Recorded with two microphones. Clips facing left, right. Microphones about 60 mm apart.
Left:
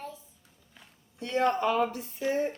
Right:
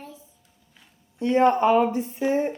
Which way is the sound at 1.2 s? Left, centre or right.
Right.